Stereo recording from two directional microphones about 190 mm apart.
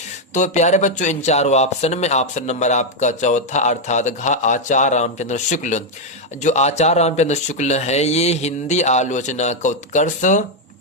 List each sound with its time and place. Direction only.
0.3 s speech: 40° left (ahead or behind)